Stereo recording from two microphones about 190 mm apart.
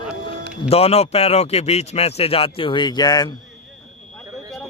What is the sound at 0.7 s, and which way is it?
A man's voice, 30° left (ahead or behind).